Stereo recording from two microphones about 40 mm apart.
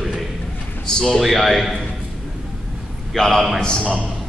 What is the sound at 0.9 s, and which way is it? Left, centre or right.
Speech, centre.